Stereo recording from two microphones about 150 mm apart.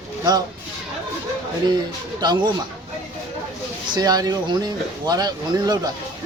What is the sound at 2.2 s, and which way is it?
Speech, 30° right (ahead or behind).